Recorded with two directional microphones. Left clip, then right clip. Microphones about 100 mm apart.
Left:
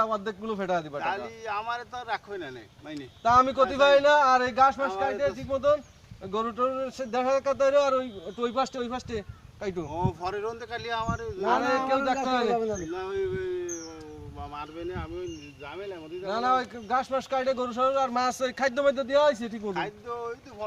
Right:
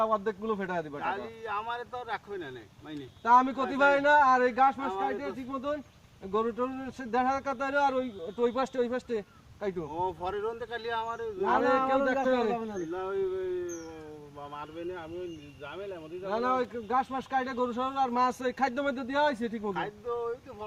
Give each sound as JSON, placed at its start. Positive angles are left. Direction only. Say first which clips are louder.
{"t": 0.0, "sound": "a man's voice", "louder": "even", "side_deg": 35}
{"t": 1.0, "sound": "speech", "louder": "left 3 dB", "side_deg": 0}
{"t": 3.2, "sound": "a man's voice", "louder": "left 3 dB", "side_deg": 40}
{"t": 6.3, "sound": "a man's voice", "louder": "left 3 dB", "side_deg": 45}
{"t": 9.9, "sound": "speech", "louder": "left 2 dB", "side_deg": -5}
{"t": 11.4, "sound": "speech", "louder": "left 1 dB", "side_deg": 30}
{"t": 12.9, "sound": "speech", "louder": "left 1 dB", "side_deg": -10}
{"t": 16.3, "sound": "speech", "louder": "left 3 dB", "side_deg": 30}
{"t": 19.7, "sound": "speech", "louder": "left 1 dB", "side_deg": -5}